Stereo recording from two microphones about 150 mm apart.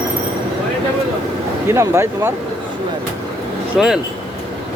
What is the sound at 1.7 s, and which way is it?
Speech, 20° right (ahead or behind).